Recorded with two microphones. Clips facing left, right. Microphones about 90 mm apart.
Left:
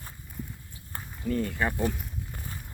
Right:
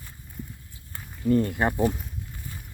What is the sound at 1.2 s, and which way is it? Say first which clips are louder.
Speech: right 6 dB; 35° right (ahead or behind).